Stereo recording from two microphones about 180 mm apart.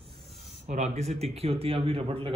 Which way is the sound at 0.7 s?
40° right (ahead or behind).